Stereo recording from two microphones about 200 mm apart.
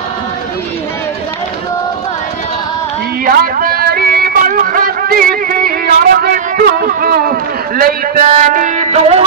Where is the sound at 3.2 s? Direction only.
45° right (ahead or behind).